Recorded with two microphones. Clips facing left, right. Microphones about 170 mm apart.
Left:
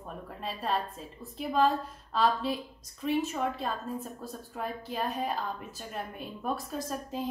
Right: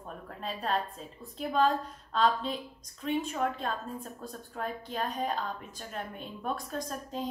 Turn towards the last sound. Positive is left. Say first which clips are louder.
# left 1 dB
turn(degrees=5)  # may be behind; listen again after turning